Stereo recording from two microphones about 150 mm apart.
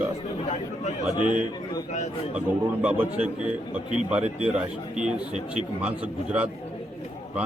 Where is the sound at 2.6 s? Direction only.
10° right (ahead or behind).